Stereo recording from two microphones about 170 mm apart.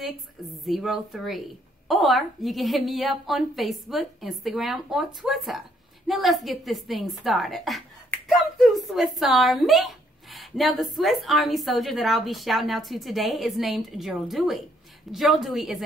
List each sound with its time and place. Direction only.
0.7 s a woman's voice: centre (ahead or behind)